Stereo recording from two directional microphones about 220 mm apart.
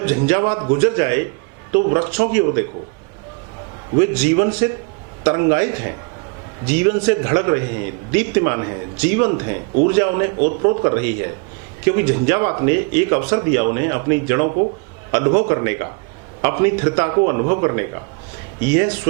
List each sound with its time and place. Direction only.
0.3 s a man's voice: 15° right (ahead or behind)
3.9 s a man's voice: 10° right (ahead or behind)